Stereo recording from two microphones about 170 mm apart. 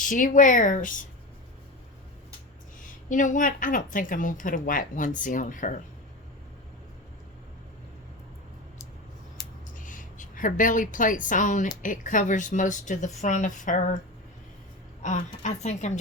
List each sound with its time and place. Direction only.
0.1 s a woman's voice: 50° left (ahead or behind)
3.1 s a woman's voice: 50° left (ahead or behind)
9.7 s a woman's voice: 50° left (ahead or behind)
15.0 s a woman's voice: 45° left (ahead or behind)